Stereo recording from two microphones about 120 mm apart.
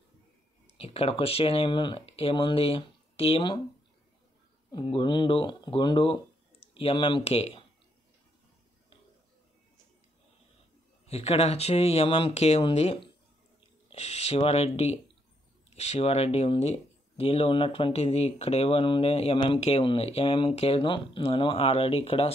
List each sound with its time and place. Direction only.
0.7 s speech: 55° left (ahead or behind)
4.7 s speech: 45° left (ahead or behind)
7.2 s speech: 55° left (ahead or behind)
11.1 s speech: 55° left (ahead or behind)